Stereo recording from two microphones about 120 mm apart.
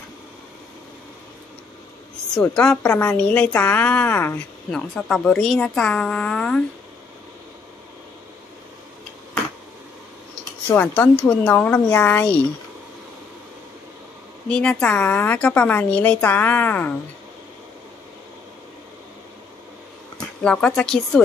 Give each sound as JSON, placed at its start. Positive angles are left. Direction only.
{"t": 2.5, "sound": "a woman's voice", "side_deg": 10}
{"t": 3.2, "sound": "a woman's voice", "side_deg": 10}
{"t": 4.6, "sound": "speech", "side_deg": 5}
{"t": 10.7, "sound": "a woman's voice", "side_deg": 15}
{"t": 14.5, "sound": "a woman's voice", "side_deg": 10}
{"t": 20.4, "sound": "speech", "side_deg": 5}